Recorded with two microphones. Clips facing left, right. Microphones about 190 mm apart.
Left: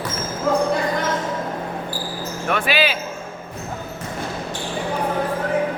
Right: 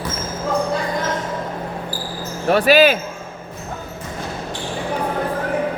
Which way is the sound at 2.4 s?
35° right (ahead or behind).